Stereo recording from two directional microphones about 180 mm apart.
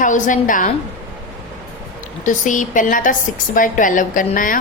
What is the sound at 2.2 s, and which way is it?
A woman's voice, 45° left (ahead or behind).